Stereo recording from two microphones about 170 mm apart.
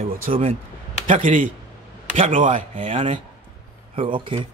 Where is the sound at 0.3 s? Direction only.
40° right (ahead or behind).